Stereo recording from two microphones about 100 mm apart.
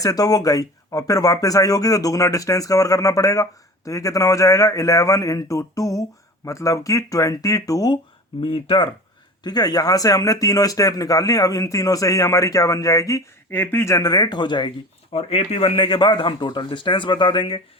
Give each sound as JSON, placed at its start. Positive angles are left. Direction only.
{"t": 0.0, "sound": "a man's voice", "side_deg": 40}
{"t": 8.4, "sound": "speech", "side_deg": 60}
{"t": 9.4, "sound": "a man's voice", "side_deg": 45}
{"t": 13.5, "sound": "speech", "side_deg": 20}
{"t": 14.0, "sound": "speech", "side_deg": 40}
{"t": 15.1, "sound": "speech", "side_deg": 75}